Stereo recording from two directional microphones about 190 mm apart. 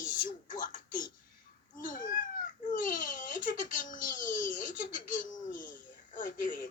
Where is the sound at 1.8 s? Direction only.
45° left (ahead or behind).